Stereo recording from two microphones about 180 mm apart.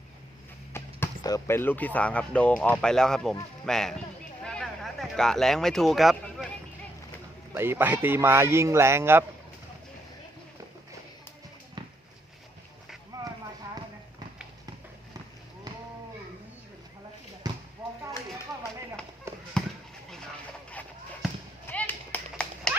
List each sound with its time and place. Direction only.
0.7 s speech: 15° left (ahead or behind)
4.4 s a sound: 5° left (ahead or behind)
7.5 s speech: 15° right (ahead or behind)
13.1 s clip-clop: 20° right (ahead or behind)
17.5 s basketball bounce: 20° right (ahead or behind)
19.3 s fireworks: 15° right (ahead or behind)
21.7 s a sound: 10° left (ahead or behind)